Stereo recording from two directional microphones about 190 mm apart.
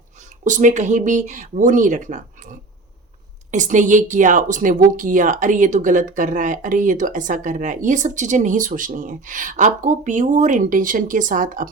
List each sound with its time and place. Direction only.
0.4 s speech: 40° right (ahead or behind)